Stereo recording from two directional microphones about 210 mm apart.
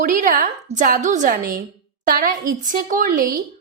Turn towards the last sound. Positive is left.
turn(degrees=-40)  # may be behind; listen again after turning